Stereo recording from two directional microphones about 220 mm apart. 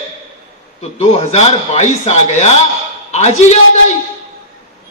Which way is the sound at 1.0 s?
30° left (ahead or behind).